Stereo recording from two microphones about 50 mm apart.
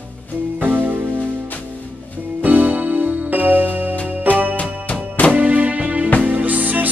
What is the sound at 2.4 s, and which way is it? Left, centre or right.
Music, right.